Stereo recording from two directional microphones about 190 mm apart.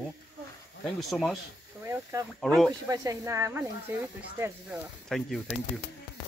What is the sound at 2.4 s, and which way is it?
Speech, 5° left (ahead or behind).